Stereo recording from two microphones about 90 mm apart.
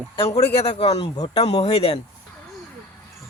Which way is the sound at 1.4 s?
90° left.